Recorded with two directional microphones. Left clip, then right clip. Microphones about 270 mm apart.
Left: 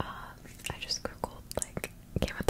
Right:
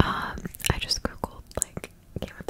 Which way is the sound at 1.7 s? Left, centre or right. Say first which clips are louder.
Left 2 dB; centre.